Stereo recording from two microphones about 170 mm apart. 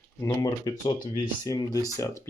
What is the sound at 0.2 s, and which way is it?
Speech, 20° left (ahead or behind).